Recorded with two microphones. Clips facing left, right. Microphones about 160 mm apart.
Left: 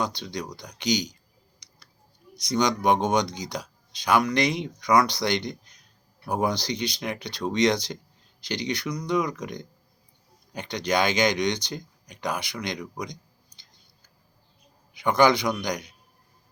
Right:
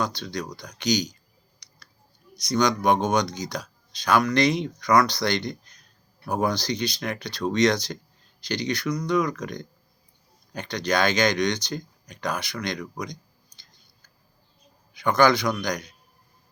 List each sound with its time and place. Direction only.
0.0 s speech: 20° left (ahead or behind)
2.3 s speech: 20° left (ahead or behind)
14.9 s speech: 20° left (ahead or behind)